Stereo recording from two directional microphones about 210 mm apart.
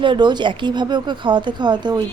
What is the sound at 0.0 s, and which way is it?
Speech, 20° right (ahead or behind).